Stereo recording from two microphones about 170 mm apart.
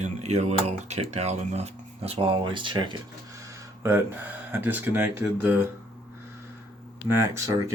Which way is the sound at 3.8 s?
15° right (ahead or behind).